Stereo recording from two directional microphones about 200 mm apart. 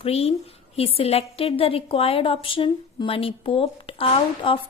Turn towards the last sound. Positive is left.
turn(degrees=30)  # may be behind; listen again after turning